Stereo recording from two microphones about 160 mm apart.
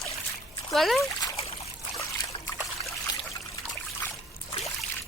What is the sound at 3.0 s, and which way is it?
Trickle, 20° left (ahead or behind).